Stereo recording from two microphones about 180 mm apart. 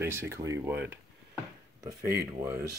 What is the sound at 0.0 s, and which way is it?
Speech, 15° right (ahead or behind).